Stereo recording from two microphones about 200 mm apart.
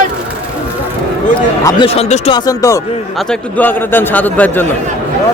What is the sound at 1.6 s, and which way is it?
Speech, 30° left (ahead or behind).